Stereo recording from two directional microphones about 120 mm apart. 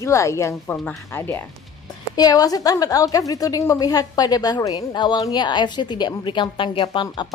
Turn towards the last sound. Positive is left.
turn(degrees=45)  # may be behind; listen again after turning